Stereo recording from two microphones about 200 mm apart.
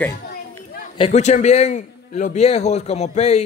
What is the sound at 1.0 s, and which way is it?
A man's voice, 35° left (ahead or behind).